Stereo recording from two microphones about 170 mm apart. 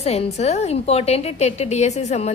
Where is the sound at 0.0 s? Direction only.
40° left (ahead or behind).